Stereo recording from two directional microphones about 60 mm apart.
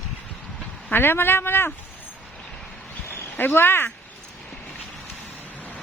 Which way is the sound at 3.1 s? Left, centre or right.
Left.